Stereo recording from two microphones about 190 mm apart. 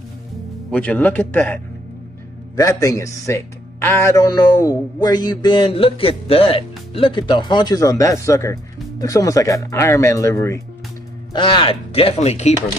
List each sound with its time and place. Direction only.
0.7 s a man's voice: 5° left (ahead or behind); by 12.5 s 35° left (ahead or behind)